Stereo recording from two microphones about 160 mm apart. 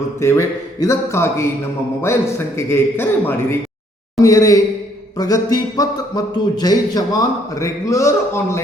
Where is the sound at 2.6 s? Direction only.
15° left (ahead or behind).